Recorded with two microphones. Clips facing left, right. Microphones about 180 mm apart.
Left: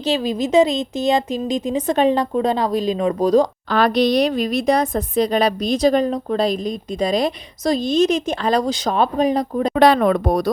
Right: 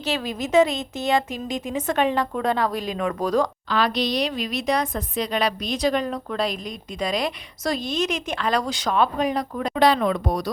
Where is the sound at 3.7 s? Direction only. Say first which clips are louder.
Left 7 dB; 50° left (ahead or behind).